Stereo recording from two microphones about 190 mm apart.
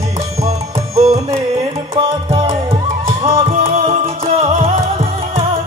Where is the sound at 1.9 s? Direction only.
30° right (ahead or behind).